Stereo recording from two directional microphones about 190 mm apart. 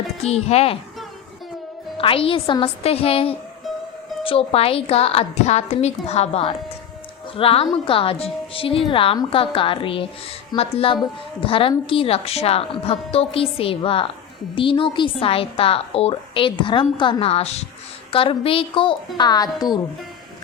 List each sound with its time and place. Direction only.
0.2 s a woman's voice: 35° left (ahead or behind)
2.0 s a woman's voice: 30° left (ahead or behind)